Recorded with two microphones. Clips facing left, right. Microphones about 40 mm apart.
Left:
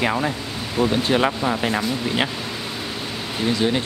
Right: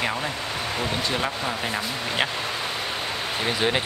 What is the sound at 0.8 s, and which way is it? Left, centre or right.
Speech, left.